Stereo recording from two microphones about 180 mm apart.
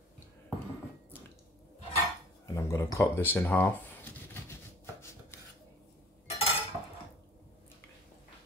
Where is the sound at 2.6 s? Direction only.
15° left (ahead or behind).